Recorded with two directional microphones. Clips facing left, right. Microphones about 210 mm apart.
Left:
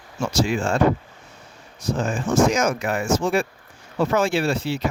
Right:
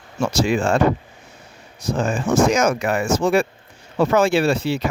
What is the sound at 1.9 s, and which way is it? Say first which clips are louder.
Speech: right 2 dB; 80° right.